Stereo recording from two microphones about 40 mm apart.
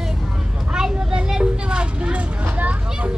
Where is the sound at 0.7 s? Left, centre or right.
Centre; by 3.1 s right.